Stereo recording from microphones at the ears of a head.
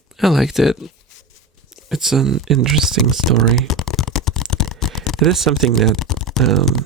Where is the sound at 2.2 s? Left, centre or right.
Right.